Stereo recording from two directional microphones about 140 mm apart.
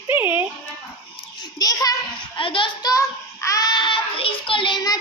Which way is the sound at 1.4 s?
25° left (ahead or behind).